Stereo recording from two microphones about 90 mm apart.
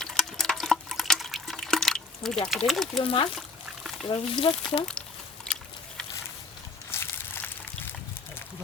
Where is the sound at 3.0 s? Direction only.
80° left.